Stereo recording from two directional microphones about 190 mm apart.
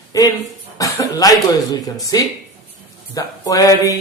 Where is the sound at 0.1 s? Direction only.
20° left (ahead or behind).